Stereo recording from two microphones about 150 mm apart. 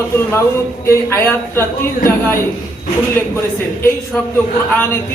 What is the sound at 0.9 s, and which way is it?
Speech, 15° left (ahead or behind).